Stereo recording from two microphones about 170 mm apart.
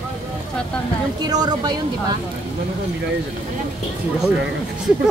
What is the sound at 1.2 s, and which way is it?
Speech, 25° right (ahead or behind).